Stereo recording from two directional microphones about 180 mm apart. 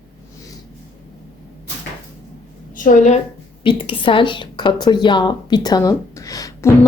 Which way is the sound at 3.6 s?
30° left (ahead or behind).